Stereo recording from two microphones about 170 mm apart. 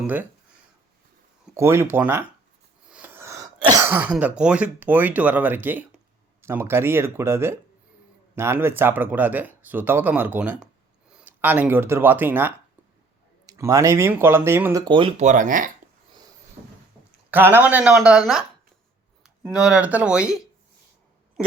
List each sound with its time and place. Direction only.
0.0 s speech: 10° right (ahead or behind)
1.5 s speech: 15° right (ahead or behind)
15.2 s speech: 45° right (ahead or behind)
17.3 s speech: 10° right (ahead or behind)
19.5 s speech: 5° right (ahead or behind)